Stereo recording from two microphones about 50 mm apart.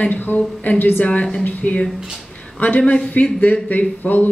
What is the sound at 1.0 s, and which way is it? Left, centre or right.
Speech, left.